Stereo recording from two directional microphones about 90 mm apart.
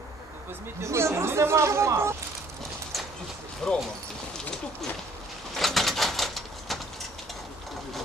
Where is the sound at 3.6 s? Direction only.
10° left (ahead or behind).